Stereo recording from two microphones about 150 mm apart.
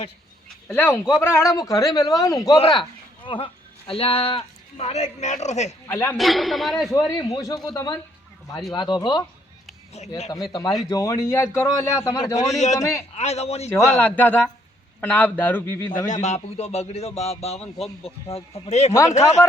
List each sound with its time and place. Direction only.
0.7 s a man's voice: 15° left (ahead or behind)
2.6 s a man's voice: 35° left (ahead or behind)
5.9 s a man's voice: 10° left (ahead or behind)
6.1 s a man's voice: centre (ahead or behind)
7.3 s a man's voice: 25° left (ahead or behind)
10.3 s a man's voice: 25° left (ahead or behind)
12.4 s speech: 50° left (ahead or behind)
12.8 s a man's voice: 20° left (ahead or behind)
13.1 s speech: 45° left (ahead or behind)
13.7 s a man's voice: 20° left (ahead or behind)
16.0 s speech: 50° left (ahead or behind)